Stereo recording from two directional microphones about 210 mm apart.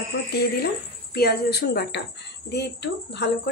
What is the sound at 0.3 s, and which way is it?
Speech, 50° left (ahead or behind).